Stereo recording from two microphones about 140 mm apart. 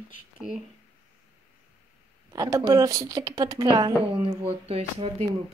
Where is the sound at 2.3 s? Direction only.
25° right (ahead or behind).